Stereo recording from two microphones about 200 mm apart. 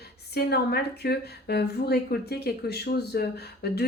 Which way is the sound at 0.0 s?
55° left (ahead or behind).